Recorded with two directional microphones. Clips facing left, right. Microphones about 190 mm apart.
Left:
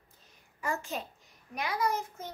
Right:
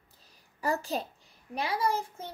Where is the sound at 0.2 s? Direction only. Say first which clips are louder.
Right 5 dB; 35° right (ahead or behind).